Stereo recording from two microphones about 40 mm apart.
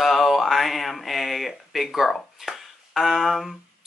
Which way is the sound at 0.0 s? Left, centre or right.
Centre.